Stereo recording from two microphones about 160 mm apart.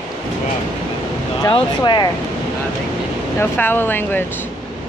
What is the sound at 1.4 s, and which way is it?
Speech, 25° left (ahead or behind).